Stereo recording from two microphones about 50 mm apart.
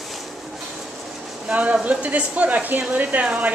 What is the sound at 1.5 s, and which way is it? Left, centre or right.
A woman's voice, right.